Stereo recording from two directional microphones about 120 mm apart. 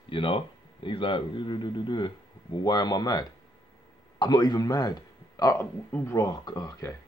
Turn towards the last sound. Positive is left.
turn(degrees=35)  # may be behind; listen again after turning